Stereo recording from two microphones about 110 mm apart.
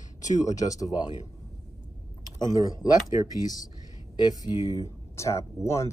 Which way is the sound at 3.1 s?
35° right (ahead or behind).